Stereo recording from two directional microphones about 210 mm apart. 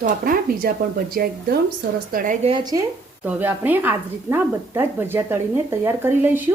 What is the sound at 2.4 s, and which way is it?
Speech, 20° right (ahead or behind).